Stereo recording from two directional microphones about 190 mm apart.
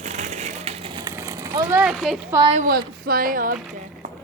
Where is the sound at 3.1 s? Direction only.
50° right (ahead or behind).